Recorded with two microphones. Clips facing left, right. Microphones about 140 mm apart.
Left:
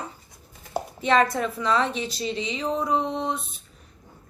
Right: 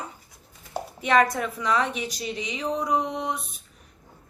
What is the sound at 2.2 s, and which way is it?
Speech, 25° left (ahead or behind).